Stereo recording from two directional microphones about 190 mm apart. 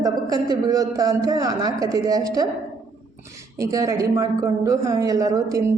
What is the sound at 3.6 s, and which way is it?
A woman's voice, 20° right (ahead or behind).